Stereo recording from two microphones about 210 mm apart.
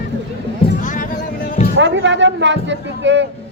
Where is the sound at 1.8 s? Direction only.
60° right (ahead or behind).